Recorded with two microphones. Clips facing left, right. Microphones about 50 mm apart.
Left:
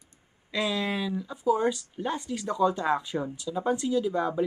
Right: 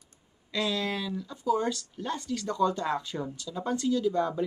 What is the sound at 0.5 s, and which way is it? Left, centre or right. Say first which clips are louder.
Speech: left 2 dB; centre.